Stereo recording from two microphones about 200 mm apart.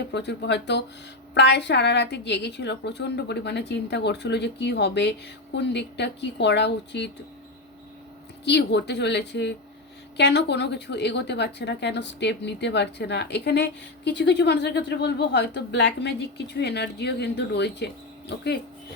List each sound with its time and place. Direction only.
0.1 s a woman's voice: 60° left (ahead or behind)
8.4 s a woman's voice: 60° left (ahead or behind)